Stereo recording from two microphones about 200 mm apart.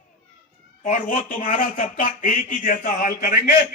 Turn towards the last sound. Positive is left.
turn(degrees=40)  # may be behind; listen again after turning